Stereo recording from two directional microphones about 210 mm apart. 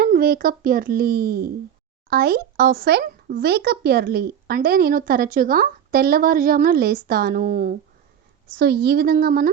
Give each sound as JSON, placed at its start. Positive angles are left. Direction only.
{"t": 0.0, "sound": "speech", "side_deg": -45}